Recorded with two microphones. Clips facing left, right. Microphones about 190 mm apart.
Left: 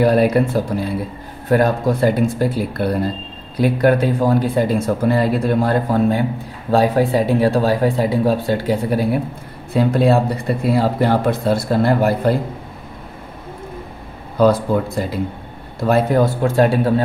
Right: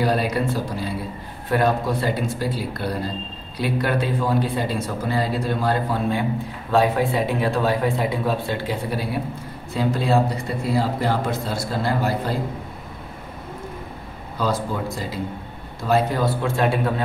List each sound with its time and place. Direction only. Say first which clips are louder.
0.0 s speech: left 8 dB; 55° left (ahead or behind)
1.5 s speech: left 5 dB; 45° left (ahead or behind)
9.8 s speech: left 6 dB; 60° left (ahead or behind)
14.4 s speech: left 9 dB; 60° left (ahead or behind); by 16.9 s 35° left (ahead or behind)